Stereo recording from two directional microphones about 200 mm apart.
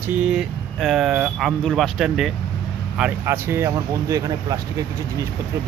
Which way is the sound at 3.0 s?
10° right (ahead or behind).